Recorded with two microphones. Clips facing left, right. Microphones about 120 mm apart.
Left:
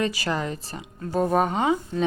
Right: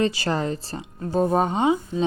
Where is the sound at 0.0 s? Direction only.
30° right (ahead or behind).